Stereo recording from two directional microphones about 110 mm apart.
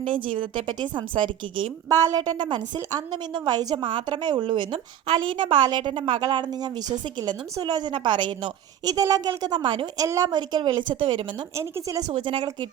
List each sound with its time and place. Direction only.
0.1 s a woman's voice: 50° right (ahead or behind)
1.9 s a woman's voice: 35° right (ahead or behind)
8.8 s a woman's voice: 35° right (ahead or behind)
11.5 s a woman's voice: 30° right (ahead or behind)
12.2 s a woman's voice: 45° right (ahead or behind)